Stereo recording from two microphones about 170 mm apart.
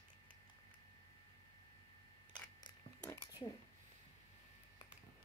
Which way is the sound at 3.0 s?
15° left (ahead or behind).